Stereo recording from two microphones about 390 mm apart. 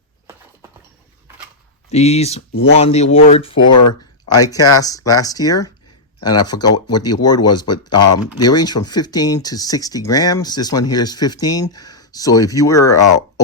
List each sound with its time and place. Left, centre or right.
1.9 s speech: centre
4.8 s speech: centre
6.7 s speech: left
6.9 s speech: centre